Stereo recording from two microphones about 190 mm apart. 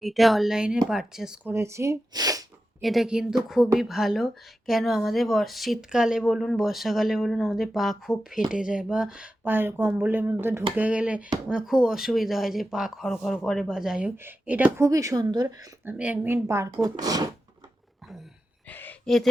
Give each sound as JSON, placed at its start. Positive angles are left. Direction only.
{"t": 0.0, "sound": "speech", "side_deg": 0}
{"t": 1.5, "sound": "speech", "side_deg": -15}
{"t": 2.8, "sound": "speech", "side_deg": 0}
{"t": 15.9, "sound": "speech", "side_deg": -5}
{"t": 18.7, "sound": "a sound", "side_deg": 10}